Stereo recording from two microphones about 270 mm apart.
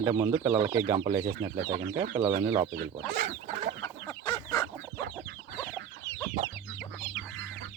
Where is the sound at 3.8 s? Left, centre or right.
Centre.